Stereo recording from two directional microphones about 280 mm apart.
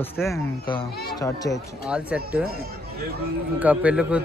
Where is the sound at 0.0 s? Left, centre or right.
Centre.